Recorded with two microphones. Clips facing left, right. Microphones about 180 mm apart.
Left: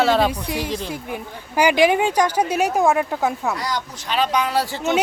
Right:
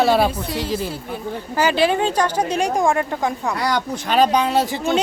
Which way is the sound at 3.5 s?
65° right (ahead or behind).